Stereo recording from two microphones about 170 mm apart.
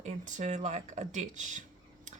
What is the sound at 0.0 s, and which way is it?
Speech, 45° right (ahead or behind).